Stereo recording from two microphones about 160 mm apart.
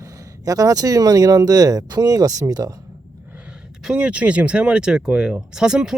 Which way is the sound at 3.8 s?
5° right (ahead or behind).